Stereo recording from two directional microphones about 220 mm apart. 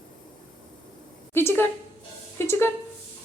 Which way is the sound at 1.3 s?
10° left (ahead or behind).